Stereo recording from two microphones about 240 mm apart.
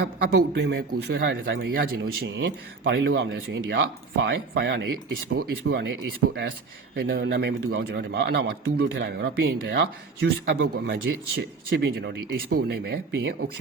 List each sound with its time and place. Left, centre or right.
0.0 s a man's voice: right
6.9 s a man's voice: right